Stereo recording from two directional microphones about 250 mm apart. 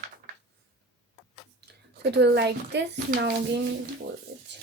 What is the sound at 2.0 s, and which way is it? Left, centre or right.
Speech, right.